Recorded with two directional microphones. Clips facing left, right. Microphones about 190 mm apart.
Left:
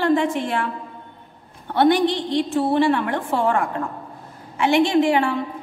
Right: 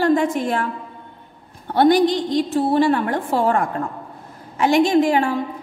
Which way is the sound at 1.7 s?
40° right (ahead or behind).